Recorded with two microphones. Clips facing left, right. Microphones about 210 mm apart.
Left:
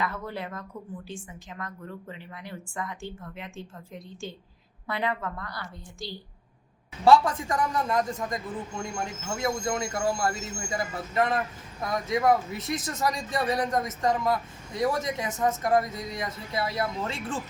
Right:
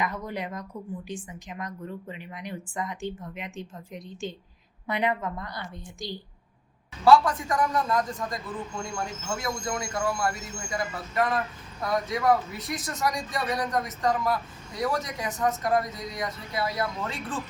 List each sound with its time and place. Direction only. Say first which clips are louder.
0.0 s a woman's voice: right 1 dB; 15° right (ahead or behind)
7.0 s speech: even; 25° left (ahead or behind)